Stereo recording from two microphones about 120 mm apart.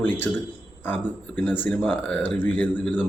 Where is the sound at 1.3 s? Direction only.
15° left (ahead or behind).